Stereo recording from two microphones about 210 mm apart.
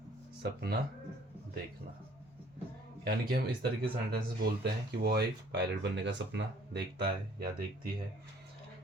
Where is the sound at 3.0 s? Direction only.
50° right (ahead or behind).